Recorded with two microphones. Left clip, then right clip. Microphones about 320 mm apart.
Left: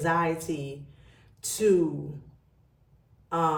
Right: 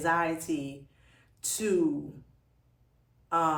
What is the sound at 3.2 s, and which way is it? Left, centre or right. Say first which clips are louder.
Sigh: even; centre.